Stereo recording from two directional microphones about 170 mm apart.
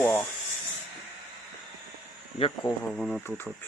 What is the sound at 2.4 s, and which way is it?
Speech, 35° left (ahead or behind).